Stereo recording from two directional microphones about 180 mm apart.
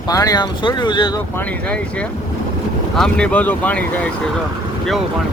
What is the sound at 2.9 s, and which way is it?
Speech, 5° left (ahead or behind).